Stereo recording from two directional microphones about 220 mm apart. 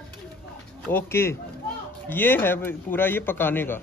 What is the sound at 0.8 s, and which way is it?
A man's voice, 10° left (ahead or behind).